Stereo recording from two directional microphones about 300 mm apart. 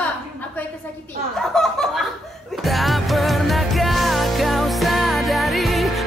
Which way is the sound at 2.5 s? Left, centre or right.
Centre.